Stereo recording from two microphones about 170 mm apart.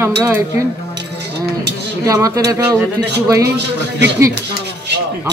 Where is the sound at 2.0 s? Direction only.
20° right (ahead or behind).